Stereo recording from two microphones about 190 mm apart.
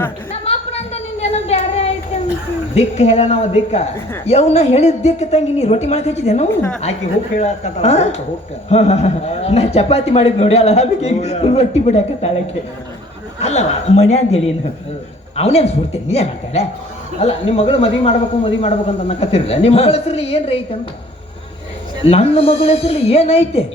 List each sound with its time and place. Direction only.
0.4 s a sound: 35° left (ahead or behind)
2.7 s a man's voice: 35° left (ahead or behind)
6.5 s a woman's voice: 10° left (ahead or behind)
7.3 s a man's voice: 35° left (ahead or behind)
13.4 s a man's voice: 35° left (ahead or behind)
22.0 s a man's voice: 30° left (ahead or behind)